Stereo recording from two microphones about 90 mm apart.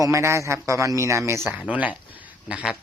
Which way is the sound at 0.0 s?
35° right (ahead or behind).